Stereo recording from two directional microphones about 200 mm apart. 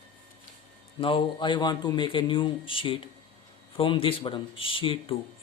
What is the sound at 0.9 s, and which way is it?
Speech, 25° left (ahead or behind).